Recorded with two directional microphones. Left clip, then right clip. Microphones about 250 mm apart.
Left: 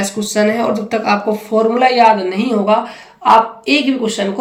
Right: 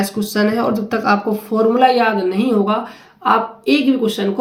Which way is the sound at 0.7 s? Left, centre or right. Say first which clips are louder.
Left 1 dB; right.